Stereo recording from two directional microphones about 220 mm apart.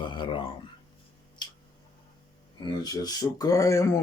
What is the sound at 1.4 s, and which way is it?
Tick, 20° left (ahead or behind).